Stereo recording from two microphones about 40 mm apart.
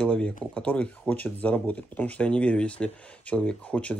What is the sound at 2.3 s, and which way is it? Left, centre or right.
Speech, left.